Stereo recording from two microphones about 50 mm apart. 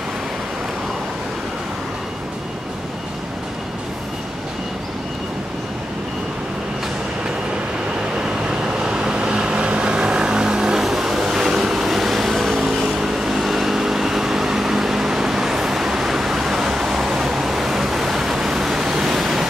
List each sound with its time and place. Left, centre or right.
8.2 s vehicle: centre